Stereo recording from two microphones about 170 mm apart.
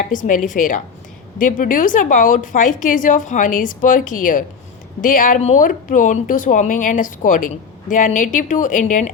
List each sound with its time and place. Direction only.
0.1 s a woman's voice: 50° left (ahead or behind)